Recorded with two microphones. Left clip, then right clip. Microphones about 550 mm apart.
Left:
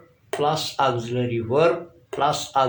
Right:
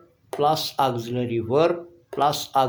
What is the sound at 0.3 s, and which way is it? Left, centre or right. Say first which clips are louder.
Speech: right 1 dB; right.